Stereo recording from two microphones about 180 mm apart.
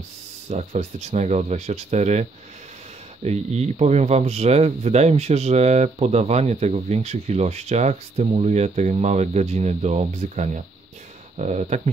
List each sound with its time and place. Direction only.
0.5 s speech: 35° right (ahead or behind)